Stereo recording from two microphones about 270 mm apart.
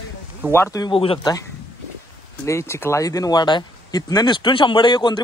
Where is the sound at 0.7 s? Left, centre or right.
Centre.